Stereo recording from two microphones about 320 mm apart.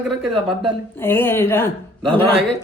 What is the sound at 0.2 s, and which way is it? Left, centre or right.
Speech, centre.